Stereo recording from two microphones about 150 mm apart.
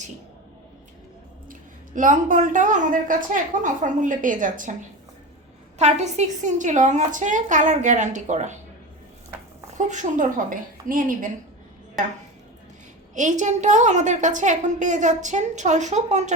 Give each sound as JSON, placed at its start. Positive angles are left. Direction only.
{"t": 2.0, "sound": "a woman's voice", "side_deg": -60}
{"t": 5.8, "sound": "a woman's voice", "side_deg": -50}
{"t": 9.7, "sound": "a woman's voice", "side_deg": -55}
{"t": 13.1, "sound": "a woman's voice", "side_deg": -55}